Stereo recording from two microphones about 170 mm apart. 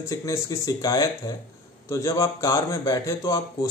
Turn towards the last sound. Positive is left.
turn(degrees=20)  # may be behind; listen again after turning